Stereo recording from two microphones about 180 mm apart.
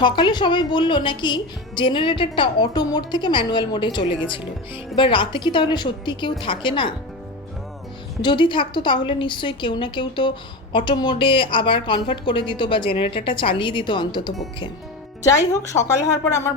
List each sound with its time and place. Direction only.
0.0 s a woman's voice: 25° left (ahead or behind)
8.2 s a woman's voice: 25° left (ahead or behind)
15.5 s speech: 15° left (ahead or behind)